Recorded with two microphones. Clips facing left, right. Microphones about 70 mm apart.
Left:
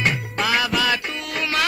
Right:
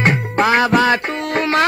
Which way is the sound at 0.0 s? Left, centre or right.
Right.